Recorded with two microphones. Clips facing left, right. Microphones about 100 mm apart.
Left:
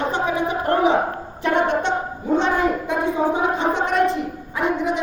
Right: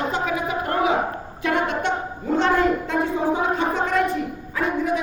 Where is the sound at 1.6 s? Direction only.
20° left (ahead or behind).